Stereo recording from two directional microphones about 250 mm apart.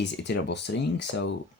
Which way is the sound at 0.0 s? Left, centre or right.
Left.